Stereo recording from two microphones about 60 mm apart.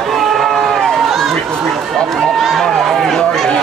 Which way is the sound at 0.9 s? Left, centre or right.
Centre.